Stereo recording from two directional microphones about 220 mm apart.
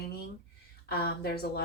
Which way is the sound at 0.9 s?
45° left (ahead or behind).